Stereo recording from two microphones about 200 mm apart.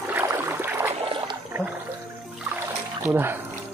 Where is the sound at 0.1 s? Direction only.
10° right (ahead or behind).